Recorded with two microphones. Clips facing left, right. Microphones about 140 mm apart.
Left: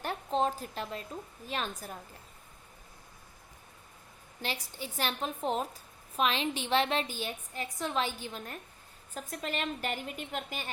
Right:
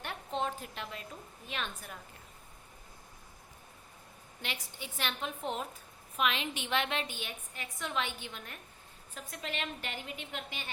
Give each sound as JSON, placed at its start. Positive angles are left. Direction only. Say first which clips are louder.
{"t": 0.0, "sound": "a sound", "louder": "left 5 dB", "side_deg": 35}
{"t": 1.5, "sound": "a woman's voice", "louder": "left 4 dB", "side_deg": 40}
{"t": 4.4, "sound": "a woman's voice", "louder": "left 5 dB", "side_deg": 35}